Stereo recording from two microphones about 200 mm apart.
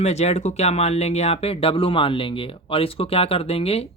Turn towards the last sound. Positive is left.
turn(degrees=30)  # may be behind; listen again after turning